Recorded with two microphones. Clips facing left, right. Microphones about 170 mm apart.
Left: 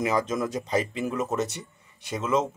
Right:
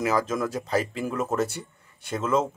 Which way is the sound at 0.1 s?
Centre (ahead or behind).